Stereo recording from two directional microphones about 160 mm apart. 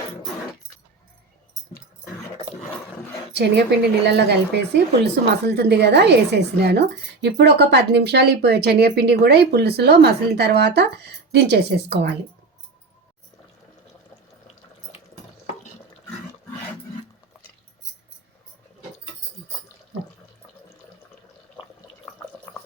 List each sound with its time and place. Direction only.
3.3 s speech: 90° right